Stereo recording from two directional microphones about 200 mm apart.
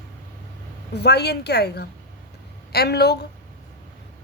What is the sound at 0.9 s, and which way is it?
Speech, 55° left (ahead or behind).